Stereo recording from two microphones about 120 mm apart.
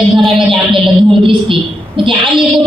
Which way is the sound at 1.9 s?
45° right (ahead or behind).